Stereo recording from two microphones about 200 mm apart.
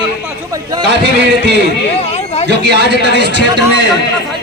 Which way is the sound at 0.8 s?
60° right (ahead or behind).